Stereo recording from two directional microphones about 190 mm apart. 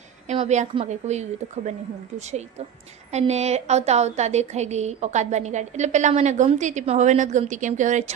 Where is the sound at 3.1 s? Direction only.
35° right (ahead or behind).